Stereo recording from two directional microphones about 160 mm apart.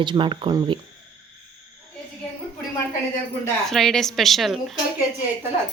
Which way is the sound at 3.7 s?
Centre (ahead or behind).